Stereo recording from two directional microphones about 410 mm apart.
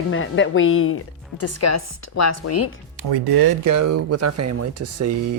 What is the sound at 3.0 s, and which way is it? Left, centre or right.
Speech, right.